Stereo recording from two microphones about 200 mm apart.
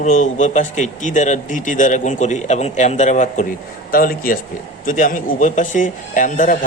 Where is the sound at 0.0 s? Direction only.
40° left (ahead or behind).